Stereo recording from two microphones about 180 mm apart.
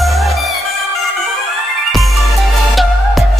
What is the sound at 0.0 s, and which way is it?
Music, centre (ahead or behind).